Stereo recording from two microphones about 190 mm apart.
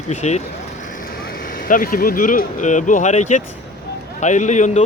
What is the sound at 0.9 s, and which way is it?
Speech, 50° left (ahead or behind).